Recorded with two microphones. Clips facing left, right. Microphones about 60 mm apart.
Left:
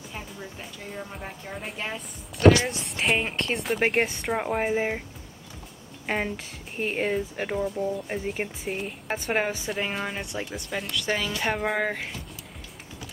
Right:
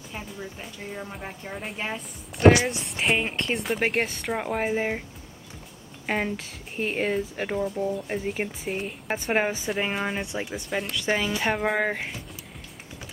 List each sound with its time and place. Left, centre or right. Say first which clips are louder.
0.1 s speech: right 3 dB; centre
6.0 s speech: right 1 dB; centre
11.4 s speech: even; centre